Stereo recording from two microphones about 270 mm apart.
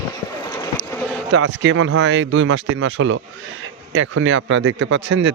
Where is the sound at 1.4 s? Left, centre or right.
Right.